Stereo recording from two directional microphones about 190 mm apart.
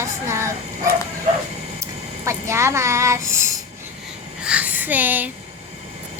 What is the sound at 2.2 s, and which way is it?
A woman's voice, 15° right (ahead or behind).